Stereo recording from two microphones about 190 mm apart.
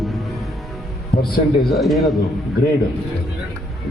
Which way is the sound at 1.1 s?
50° left (ahead or behind).